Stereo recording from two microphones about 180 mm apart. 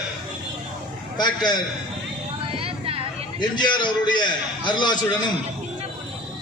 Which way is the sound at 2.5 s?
30° right (ahead or behind).